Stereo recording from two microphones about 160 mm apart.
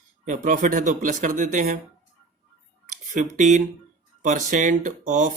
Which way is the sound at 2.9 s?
50° right (ahead or behind).